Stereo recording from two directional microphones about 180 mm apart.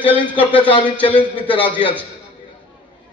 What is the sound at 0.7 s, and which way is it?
Speech, 30° left (ahead or behind).